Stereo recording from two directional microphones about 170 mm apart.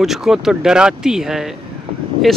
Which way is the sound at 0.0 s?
Centre (ahead or behind).